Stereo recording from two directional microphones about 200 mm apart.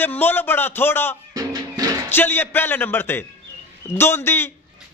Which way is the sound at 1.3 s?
15° right (ahead or behind).